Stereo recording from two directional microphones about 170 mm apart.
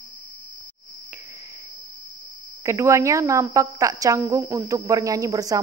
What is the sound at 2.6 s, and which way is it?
A woman's voice, 15° right (ahead or behind).